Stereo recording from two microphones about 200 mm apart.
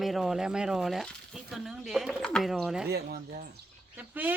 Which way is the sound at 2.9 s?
55° right (ahead or behind).